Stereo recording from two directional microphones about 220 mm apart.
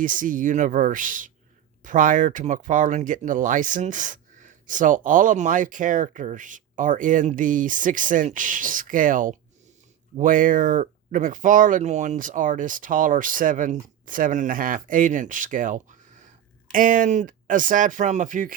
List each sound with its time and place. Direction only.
0.0 s speech: 35° right (ahead or behind)